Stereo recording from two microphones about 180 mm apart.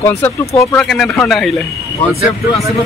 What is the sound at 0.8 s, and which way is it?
Speech, centre (ahead or behind).